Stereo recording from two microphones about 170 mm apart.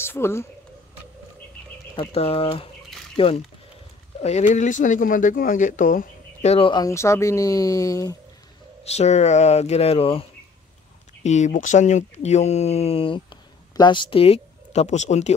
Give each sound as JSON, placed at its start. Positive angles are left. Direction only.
{"t": 0.0, "sound": "speech", "side_deg": 15}
{"t": 2.0, "sound": "speech", "side_deg": 35}
{"t": 4.2, "sound": "speech", "side_deg": 40}
{"t": 6.7, "sound": "speech", "side_deg": 20}
{"t": 8.8, "sound": "speech", "side_deg": 40}
{"t": 11.2, "sound": "speech", "side_deg": 45}